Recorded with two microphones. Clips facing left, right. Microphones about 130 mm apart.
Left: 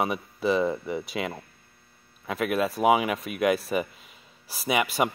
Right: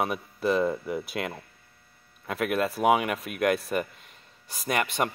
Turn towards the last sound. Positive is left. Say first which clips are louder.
# left 2 dB
turn(degrees=5)  # may be behind; listen again after turning